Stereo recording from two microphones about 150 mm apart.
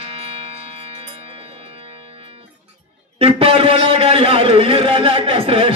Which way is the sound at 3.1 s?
35° right (ahead or behind).